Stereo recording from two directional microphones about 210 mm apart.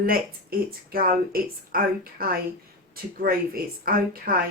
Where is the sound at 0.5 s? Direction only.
45° right (ahead or behind).